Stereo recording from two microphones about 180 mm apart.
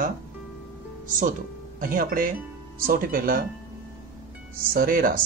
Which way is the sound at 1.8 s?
50° right (ahead or behind).